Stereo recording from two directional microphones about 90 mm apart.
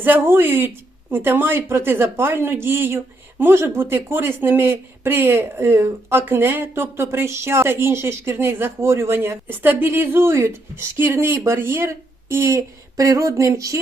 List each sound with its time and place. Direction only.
0.0 s speech: 25° right (ahead or behind)